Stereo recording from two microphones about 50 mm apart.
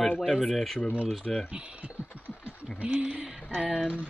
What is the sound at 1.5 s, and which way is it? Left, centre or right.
Speech, right.